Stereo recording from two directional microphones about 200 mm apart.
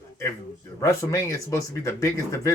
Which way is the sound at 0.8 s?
15° left (ahead or behind).